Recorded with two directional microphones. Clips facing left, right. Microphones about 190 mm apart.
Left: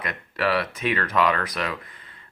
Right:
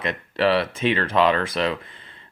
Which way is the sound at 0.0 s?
25° right (ahead or behind).